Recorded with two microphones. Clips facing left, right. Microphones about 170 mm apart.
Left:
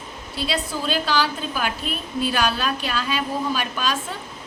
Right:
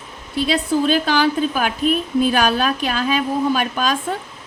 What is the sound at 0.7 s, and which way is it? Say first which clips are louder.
A woman's voice: right 8 dB; 50° right (ahead or behind).